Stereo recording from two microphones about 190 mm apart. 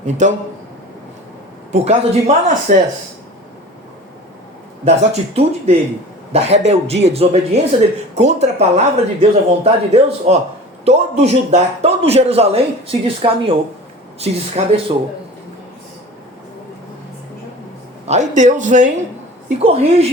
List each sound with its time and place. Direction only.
0.0 s a man's voice: 40° right (ahead or behind)
1.7 s a man's voice: 35° right (ahead or behind)
4.9 s a man's voice: 35° right (ahead or behind)
18.0 s a man's voice: 35° right (ahead or behind)